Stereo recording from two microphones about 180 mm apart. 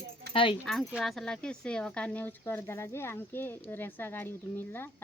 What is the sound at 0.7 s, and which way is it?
Speech, centre (ahead or behind).